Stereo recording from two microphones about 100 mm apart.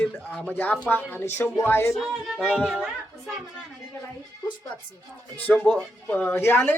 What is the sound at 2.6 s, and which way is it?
Speech, 10° right (ahead or behind).